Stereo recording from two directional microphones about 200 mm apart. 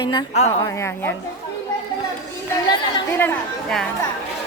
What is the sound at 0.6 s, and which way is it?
Speech, 15° left (ahead or behind).